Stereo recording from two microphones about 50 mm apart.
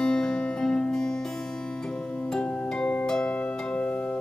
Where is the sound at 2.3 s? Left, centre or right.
Left.